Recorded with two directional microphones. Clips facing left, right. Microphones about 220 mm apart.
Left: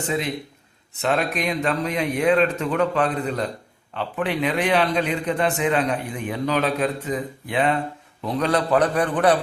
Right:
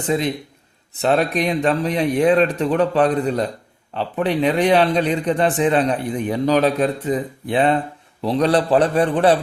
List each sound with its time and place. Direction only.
1.0 s a man's voice: 35° right (ahead or behind)